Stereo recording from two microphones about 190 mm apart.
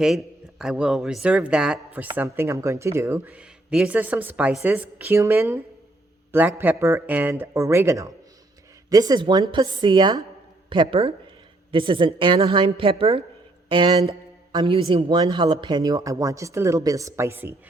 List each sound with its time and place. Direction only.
0.0 s a man's voice: centre (ahead or behind)